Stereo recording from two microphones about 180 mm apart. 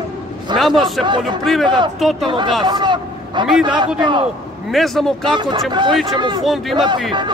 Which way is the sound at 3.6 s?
25° right (ahead or behind).